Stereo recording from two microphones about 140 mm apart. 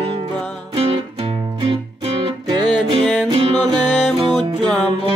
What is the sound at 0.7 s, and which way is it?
Music, 40° right (ahead or behind).